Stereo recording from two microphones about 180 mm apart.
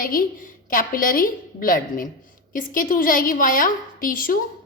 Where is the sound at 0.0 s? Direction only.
50° left (ahead or behind).